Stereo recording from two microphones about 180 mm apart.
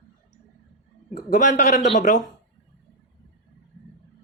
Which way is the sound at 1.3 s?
45° left (ahead or behind).